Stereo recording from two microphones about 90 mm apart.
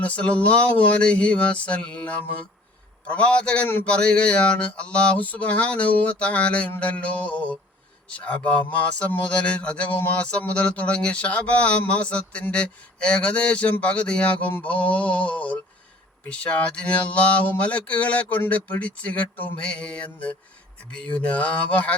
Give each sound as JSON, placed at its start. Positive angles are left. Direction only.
{"t": 0.0, "sound": "speech", "side_deg": 15}